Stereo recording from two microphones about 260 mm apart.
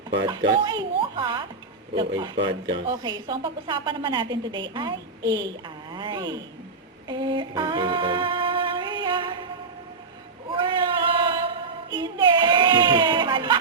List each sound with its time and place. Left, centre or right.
0.3 s a woman's voice: centre
7.1 s female singing: centre
10.5 s a sound: centre
11.3 s child singing: centre